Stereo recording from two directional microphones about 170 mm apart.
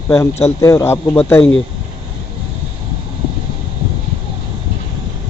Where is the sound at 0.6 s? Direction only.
15° left (ahead or behind).